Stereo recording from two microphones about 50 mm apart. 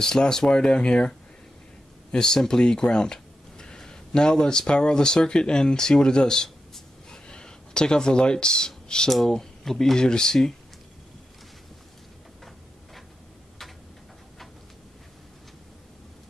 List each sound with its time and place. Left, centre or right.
0.0 s speech: centre
2.1 s speech: centre